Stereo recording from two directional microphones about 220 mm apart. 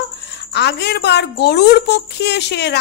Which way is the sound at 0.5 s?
50° left (ahead or behind).